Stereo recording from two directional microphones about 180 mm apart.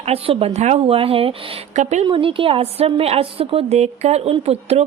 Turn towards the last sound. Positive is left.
turn(degrees=-35)  # may be behind; listen again after turning